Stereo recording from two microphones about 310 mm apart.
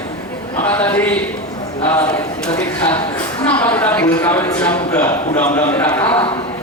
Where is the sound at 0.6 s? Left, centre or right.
Centre.